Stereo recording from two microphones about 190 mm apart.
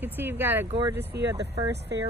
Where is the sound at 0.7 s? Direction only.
25° right (ahead or behind).